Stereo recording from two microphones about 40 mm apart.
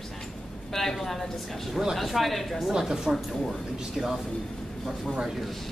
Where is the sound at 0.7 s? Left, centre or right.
Centre.